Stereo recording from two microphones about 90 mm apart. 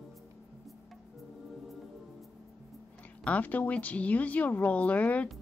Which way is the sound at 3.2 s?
15° left (ahead or behind).